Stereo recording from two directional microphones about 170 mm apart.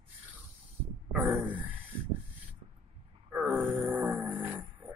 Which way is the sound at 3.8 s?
Centre (ahead or behind).